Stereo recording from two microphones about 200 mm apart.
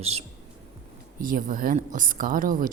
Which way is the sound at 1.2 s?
45° right (ahead or behind).